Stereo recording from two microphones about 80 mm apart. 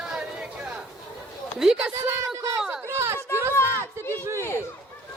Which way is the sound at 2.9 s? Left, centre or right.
Right.